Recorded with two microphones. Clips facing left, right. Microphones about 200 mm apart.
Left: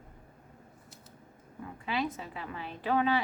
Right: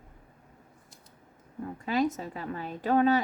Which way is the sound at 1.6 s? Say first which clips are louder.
Right 6 dB; 45° right (ahead or behind).